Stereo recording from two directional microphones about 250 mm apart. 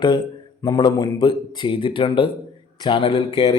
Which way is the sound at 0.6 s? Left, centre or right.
Centre.